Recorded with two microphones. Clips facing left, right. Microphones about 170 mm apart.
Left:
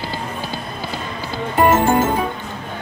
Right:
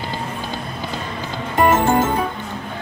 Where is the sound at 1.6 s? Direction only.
15° left (ahead or behind).